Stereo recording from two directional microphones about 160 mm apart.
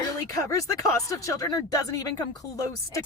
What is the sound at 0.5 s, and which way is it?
Speech, 20° left (ahead or behind).